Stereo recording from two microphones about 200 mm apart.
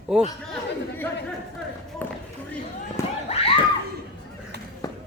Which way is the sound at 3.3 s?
30° left (ahead or behind).